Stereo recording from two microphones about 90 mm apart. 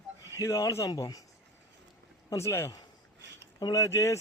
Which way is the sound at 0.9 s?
45° left (ahead or behind).